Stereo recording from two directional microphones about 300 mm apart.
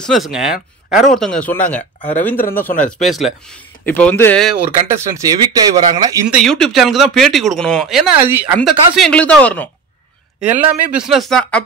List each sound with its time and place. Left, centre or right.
0.1 s speech: centre
2.7 s speech: left
3.8 s speech: centre
4.8 s speech: centre
6.4 s speech: centre